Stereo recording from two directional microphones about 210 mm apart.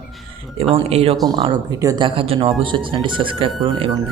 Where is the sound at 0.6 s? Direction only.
30° right (ahead or behind).